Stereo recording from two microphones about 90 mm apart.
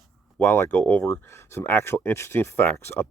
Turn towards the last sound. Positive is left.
turn(degrees=30)  # may be behind; listen again after turning